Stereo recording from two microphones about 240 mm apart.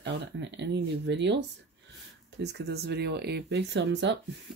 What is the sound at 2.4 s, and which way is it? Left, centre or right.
Speech, right.